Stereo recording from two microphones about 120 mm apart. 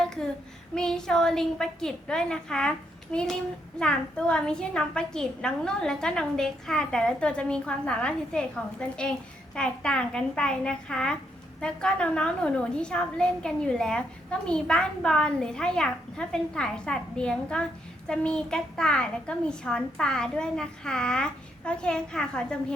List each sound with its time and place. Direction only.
0.0 s child singing: 5° left (ahead or behind)
0.8 s a woman's voice: 5° left (ahead or behind)